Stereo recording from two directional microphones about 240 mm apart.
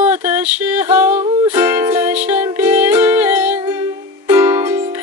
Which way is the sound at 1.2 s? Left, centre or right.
Centre.